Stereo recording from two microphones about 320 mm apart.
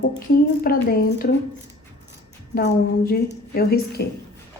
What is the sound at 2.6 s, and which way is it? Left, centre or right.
Speech, left.